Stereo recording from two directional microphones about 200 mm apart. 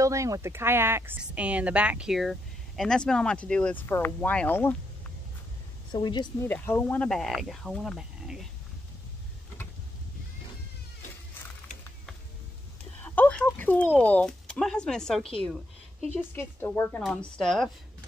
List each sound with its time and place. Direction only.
0.0 s speech: 15° right (ahead or behind); by 4.7 s 10° left (ahead or behind)
5.9 s speech: 20° left (ahead or behind)
6.4 s speech: 10° left (ahead or behind)
13.0 s a sound: 10° left (ahead or behind)
13.9 s speech: 5° left (ahead or behind)
16.3 s speech: 15° left (ahead or behind)